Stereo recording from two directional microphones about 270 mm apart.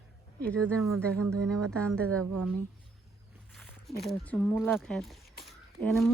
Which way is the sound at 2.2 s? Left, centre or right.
Right.